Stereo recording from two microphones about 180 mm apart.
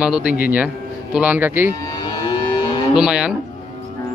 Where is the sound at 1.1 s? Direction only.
10° right (ahead or behind).